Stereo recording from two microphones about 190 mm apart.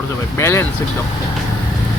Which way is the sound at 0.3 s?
15° left (ahead or behind).